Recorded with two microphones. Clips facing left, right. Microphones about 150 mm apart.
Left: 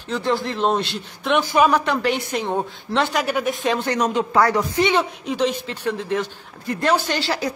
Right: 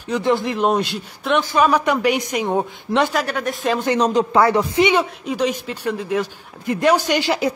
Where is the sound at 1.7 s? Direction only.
10° right (ahead or behind).